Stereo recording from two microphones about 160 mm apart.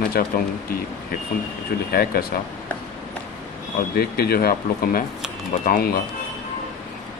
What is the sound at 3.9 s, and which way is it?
Speech, 75° left (ahead or behind).